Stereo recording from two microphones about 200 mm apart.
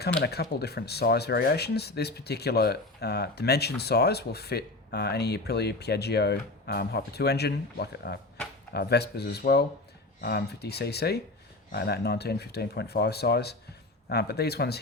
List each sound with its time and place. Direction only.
0.2 s speech: 55° left (ahead or behind)